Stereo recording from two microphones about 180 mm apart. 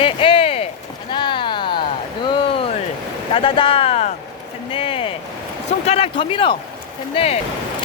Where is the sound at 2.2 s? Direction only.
30° left (ahead or behind).